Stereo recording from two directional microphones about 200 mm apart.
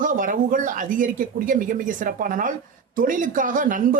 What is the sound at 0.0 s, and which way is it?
A man's voice, 40° right (ahead or behind).